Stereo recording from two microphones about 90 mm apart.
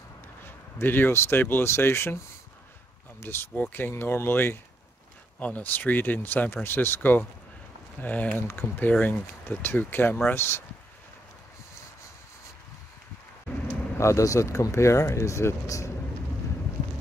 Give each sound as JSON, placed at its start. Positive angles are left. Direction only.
{"t": 0.5, "sound": "speech", "side_deg": 25}
{"t": 13.9, "sound": "speech", "side_deg": 35}